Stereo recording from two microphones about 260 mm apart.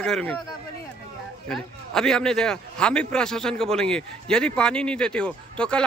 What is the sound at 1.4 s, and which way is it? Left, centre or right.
A man's voice, centre.